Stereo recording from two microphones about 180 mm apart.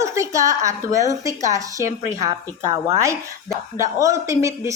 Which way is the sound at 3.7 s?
20° right (ahead or behind).